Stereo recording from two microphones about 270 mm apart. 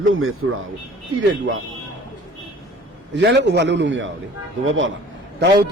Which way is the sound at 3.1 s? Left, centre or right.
Right.